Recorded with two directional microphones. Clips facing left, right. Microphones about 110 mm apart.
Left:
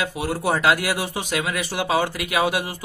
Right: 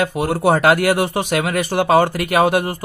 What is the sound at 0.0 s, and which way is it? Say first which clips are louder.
A man's voice: right 7 dB; 55° right (ahead or behind).